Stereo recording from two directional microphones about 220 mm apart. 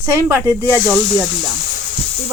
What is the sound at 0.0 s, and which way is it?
Speech, 10° right (ahead or behind).